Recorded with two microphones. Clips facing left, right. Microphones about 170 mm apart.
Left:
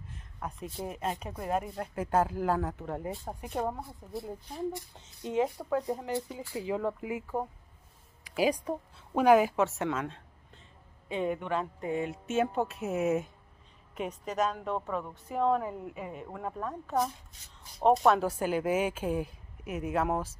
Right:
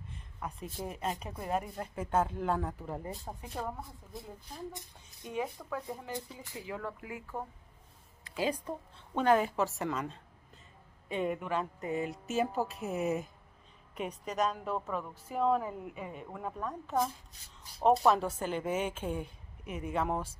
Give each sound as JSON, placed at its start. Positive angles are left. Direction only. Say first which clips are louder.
{"t": 0.0, "sound": "a sound", "louder": "left 2 dB", "side_deg": 0}
{"t": 0.8, "sound": "speech", "louder": "left 2 dB", "side_deg": 5}
{"t": 3.3, "sound": "speech", "louder": "left 8 dB", "side_deg": 20}
{"t": 8.6, "sound": "speech", "louder": "left 5 dB", "side_deg": 10}
{"t": 18.0, "sound": "speech", "louder": "left 3 dB", "side_deg": 5}